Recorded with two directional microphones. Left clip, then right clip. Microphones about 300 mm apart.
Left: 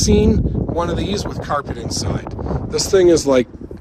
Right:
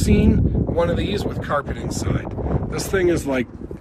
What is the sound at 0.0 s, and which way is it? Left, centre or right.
Speech, centre.